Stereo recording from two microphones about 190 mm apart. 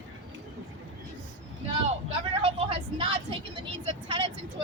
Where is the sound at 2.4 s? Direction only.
30° right (ahead or behind).